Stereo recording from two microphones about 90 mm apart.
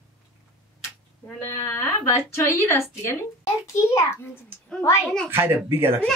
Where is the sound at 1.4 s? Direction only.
30° left (ahead or behind).